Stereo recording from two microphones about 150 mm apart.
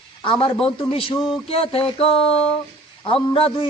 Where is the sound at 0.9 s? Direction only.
35° left (ahead or behind).